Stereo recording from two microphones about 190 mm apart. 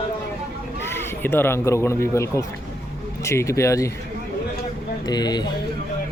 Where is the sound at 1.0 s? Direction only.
10° left (ahead or behind).